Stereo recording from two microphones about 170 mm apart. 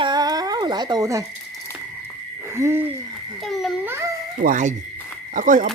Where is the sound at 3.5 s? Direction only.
Centre (ahead or behind).